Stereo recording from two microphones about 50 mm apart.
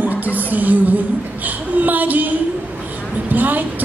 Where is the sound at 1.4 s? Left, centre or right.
Right.